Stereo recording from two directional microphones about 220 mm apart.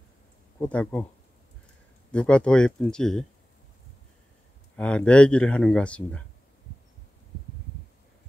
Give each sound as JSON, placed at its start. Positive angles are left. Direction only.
{"t": 0.6, "sound": "speech", "side_deg": 5}
{"t": 2.1, "sound": "speech", "side_deg": 5}
{"t": 4.7, "sound": "speech", "side_deg": 5}